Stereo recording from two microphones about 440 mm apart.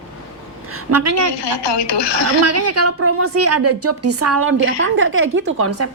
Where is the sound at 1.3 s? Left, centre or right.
Left.